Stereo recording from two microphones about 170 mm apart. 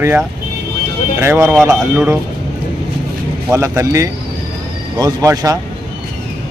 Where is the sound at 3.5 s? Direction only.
15° right (ahead or behind).